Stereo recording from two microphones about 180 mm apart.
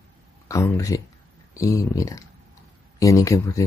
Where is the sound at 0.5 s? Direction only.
15° left (ahead or behind).